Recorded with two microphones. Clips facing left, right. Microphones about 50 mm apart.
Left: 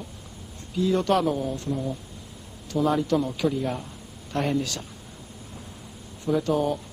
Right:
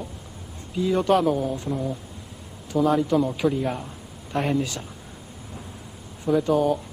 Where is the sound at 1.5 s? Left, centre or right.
Centre.